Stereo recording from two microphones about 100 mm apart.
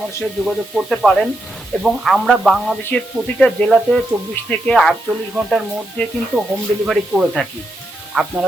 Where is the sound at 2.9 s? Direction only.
15° left (ahead or behind).